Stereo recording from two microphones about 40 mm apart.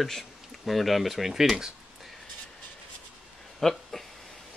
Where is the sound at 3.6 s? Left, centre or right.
Centre.